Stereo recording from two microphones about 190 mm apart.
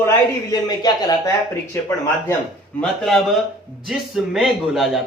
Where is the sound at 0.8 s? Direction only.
20° left (ahead or behind).